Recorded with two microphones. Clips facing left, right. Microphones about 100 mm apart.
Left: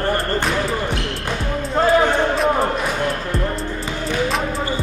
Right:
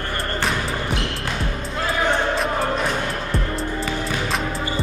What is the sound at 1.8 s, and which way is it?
Music, 40° left (ahead or behind).